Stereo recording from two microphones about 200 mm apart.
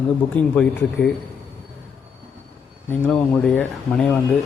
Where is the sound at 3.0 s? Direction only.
10° left (ahead or behind).